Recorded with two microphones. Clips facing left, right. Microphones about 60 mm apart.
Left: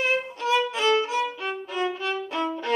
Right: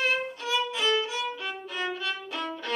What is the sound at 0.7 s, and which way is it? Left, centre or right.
Violin, left.